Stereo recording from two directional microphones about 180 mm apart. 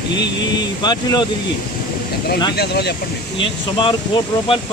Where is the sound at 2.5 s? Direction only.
65° left (ahead or behind).